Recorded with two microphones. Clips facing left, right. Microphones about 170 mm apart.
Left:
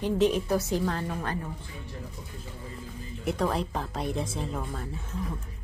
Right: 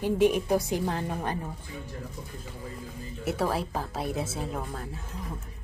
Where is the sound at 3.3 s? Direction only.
5° right (ahead or behind).